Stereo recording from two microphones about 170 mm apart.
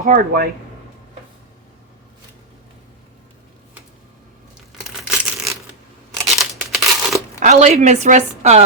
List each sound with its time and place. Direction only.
0.0 s a woman's voice: 55° right (ahead or behind)
4.8 s a sound: 5° right (ahead or behind)
6.2 s crumpling: centre (ahead or behind)
7.3 s a woman's voice: 45° right (ahead or behind)